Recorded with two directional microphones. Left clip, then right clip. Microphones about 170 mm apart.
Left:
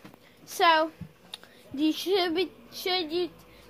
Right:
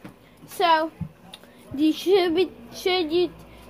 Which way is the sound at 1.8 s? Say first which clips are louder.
Right 6 dB; 10° left (ahead or behind).